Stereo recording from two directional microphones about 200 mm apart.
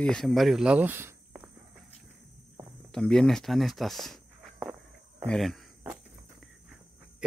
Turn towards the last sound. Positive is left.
turn(degrees=0)  # may be behind; listen again after turning